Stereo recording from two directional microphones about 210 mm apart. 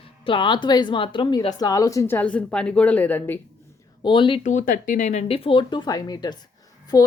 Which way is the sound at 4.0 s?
25° left (ahead or behind).